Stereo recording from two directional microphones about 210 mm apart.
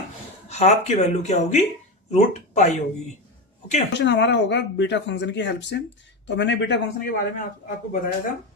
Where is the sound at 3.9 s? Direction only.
60° left (ahead or behind).